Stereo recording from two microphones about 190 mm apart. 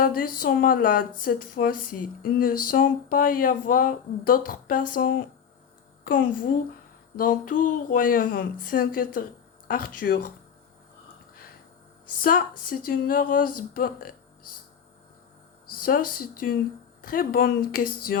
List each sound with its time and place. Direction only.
0.0 s speech: 50° left (ahead or behind)
12.2 s speech: 50° left (ahead or behind)
15.7 s speech: 50° left (ahead or behind)